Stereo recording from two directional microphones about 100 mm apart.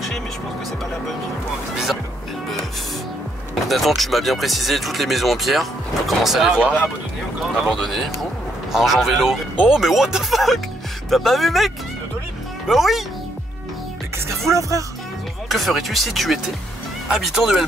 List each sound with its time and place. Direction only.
3.6 s speech: centre (ahead or behind)
14.1 s speech: 25° right (ahead or behind)
15.4 s speech: centre (ahead or behind)